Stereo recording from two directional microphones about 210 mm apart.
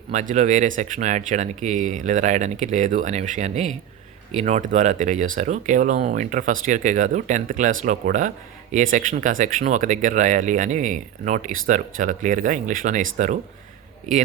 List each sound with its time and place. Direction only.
0.1 s speech: 35° right (ahead or behind)